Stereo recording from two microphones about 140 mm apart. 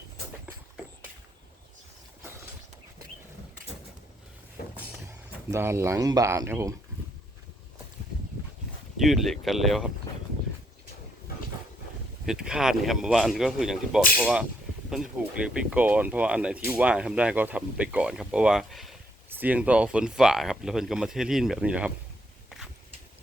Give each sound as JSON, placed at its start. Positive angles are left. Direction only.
{"t": 5.5, "sound": "speech", "side_deg": -20}
{"t": 9.0, "sound": "speech", "side_deg": 0}
{"t": 12.2, "sound": "speech", "side_deg": -5}
{"t": 19.3, "sound": "speech", "side_deg": -10}
{"t": 22.4, "sound": "a sound", "side_deg": 0}